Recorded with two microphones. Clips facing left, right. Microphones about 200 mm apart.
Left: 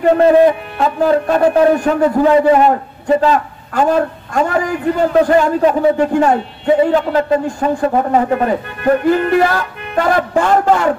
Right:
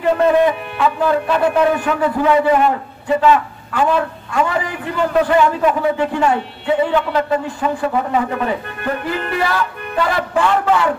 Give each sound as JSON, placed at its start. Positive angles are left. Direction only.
{"t": 0.0, "sound": "a man's voice", "side_deg": 40}